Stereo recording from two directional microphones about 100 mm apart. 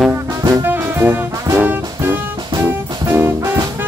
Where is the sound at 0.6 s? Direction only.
20° right (ahead or behind).